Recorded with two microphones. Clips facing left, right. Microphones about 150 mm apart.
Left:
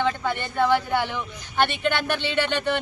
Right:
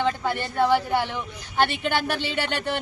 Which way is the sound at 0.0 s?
5° right (ahead or behind).